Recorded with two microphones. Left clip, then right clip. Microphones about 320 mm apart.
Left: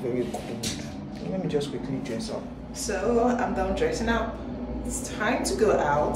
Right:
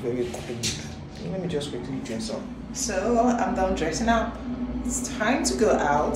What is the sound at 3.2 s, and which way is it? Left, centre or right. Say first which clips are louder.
A woman's voice: right 2 dB; centre.